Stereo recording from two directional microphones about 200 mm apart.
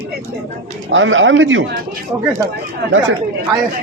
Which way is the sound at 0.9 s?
75° right (ahead or behind).